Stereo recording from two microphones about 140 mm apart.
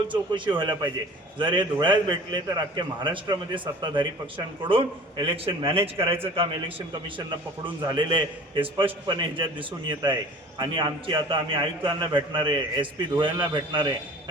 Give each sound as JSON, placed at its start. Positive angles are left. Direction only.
{"t": 0.1, "sound": "a man's voice", "side_deg": -35}
{"t": 7.9, "sound": "a man's voice", "side_deg": -35}